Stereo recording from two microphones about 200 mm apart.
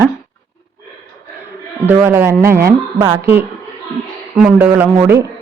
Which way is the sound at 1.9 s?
10° right (ahead or behind).